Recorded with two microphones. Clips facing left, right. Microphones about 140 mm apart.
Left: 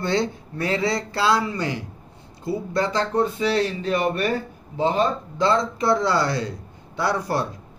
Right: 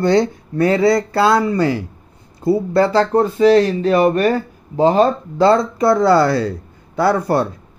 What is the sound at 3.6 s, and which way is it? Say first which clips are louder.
Speech: right 8 dB; 80° right.